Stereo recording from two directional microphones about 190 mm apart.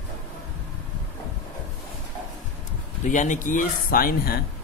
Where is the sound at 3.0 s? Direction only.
40° left (ahead or behind).